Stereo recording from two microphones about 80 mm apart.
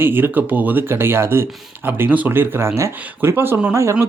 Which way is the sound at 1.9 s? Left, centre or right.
Right.